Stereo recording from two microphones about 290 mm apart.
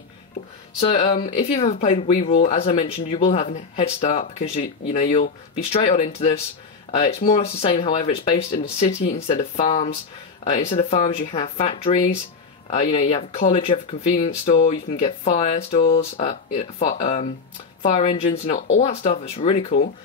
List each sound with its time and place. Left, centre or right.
0.7 s speech: left